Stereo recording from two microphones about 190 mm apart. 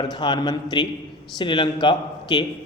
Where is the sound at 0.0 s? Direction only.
25° left (ahead or behind).